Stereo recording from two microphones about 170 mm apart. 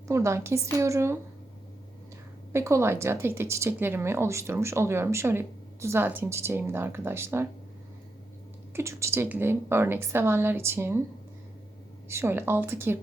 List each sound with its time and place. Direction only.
0.1 s speech: 15° right (ahead or behind)
2.5 s speech: 15° right (ahead or behind)
8.7 s speech: 15° right (ahead or behind)
12.0 s speech: 15° right (ahead or behind)